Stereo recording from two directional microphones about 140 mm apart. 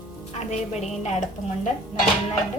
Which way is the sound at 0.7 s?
55° left (ahead or behind).